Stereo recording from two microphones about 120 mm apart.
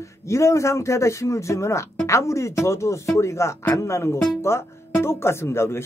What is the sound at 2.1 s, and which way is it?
Speech, 25° left (ahead or behind).